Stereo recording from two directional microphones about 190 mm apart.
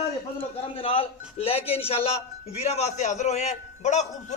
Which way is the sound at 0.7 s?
30° left (ahead or behind).